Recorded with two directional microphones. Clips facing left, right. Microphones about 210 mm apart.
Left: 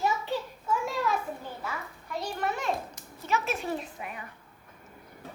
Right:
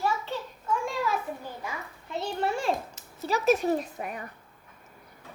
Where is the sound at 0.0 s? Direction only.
15° left (ahead or behind).